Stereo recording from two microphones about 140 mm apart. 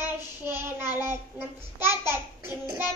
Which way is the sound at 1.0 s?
15° right (ahead or behind).